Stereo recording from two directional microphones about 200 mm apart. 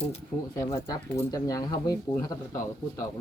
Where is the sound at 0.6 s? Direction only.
15° left (ahead or behind).